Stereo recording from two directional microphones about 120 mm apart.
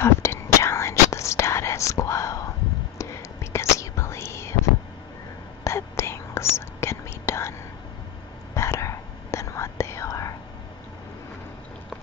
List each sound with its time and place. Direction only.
0.0 s whispering: 20° left (ahead or behind)
5.6 s whispering: 25° left (ahead or behind)
8.5 s whispering: 25° left (ahead or behind)